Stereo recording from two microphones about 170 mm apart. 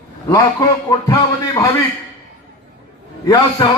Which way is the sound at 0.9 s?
20° left (ahead or behind).